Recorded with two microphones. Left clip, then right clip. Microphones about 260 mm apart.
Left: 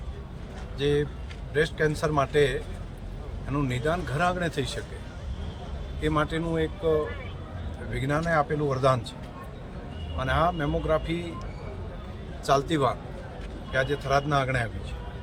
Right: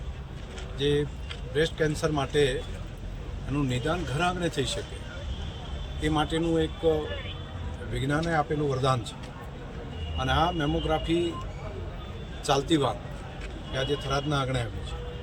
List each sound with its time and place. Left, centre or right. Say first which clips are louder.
0.8 s speech: left 1 dB; centre
3.7 s speech: left 3 dB; centre
6.0 s speech: even; centre
7.9 s speech: left 2 dB; centre
10.2 s speech: left 1 dB; centre
12.5 s speech: left 1 dB; centre